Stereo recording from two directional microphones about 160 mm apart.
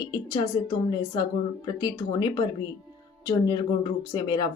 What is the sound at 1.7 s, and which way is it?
Speech, 25° left (ahead or behind).